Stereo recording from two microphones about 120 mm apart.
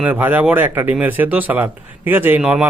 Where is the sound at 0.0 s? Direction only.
15° right (ahead or behind).